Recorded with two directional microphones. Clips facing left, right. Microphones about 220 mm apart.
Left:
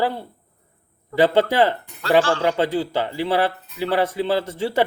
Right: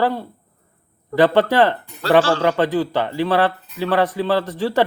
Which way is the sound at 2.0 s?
35° right (ahead or behind).